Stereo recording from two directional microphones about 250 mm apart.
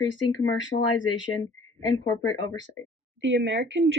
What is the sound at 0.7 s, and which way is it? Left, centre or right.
Speech, left.